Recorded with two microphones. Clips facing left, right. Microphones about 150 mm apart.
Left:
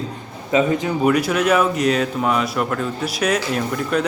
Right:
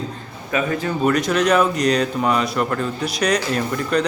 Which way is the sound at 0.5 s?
20° left (ahead or behind).